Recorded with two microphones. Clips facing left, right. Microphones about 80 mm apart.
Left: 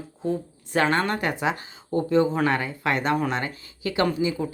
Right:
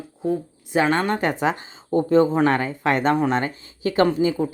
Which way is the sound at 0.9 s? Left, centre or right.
Right.